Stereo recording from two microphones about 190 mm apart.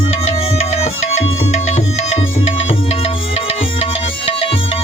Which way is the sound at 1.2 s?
35° left (ahead or behind).